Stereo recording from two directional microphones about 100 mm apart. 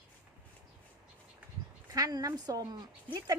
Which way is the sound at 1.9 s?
40° right (ahead or behind).